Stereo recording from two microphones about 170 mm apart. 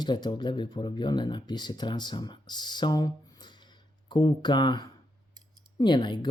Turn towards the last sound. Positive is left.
turn(degrees=25)  # may be behind; listen again after turning